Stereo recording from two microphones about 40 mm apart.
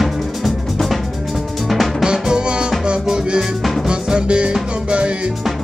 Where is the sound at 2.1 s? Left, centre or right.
Right.